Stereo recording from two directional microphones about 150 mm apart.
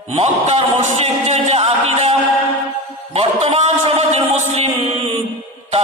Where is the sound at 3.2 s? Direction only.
45° right (ahead or behind).